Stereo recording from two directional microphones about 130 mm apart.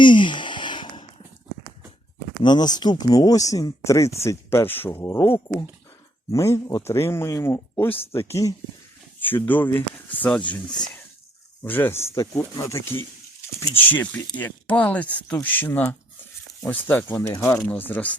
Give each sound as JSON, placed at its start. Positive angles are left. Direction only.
{"t": 0.0, "sound": "a sound", "side_deg": 40}
{"t": 2.4, "sound": "speech", "side_deg": 35}
{"t": 11.6, "sound": "speech", "side_deg": 15}